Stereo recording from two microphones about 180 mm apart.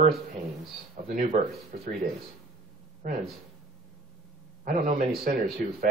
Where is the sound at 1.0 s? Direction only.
50° right (ahead or behind).